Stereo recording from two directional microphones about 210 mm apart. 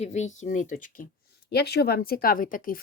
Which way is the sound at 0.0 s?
35° left (ahead or behind).